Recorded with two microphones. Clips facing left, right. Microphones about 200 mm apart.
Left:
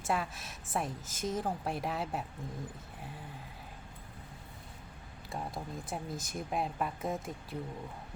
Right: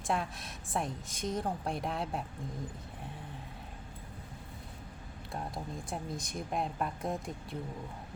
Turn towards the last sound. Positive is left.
turn(degrees=0)  # may be behind; listen again after turning